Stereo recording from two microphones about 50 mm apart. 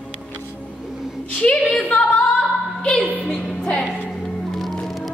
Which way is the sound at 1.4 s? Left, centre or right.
Centre.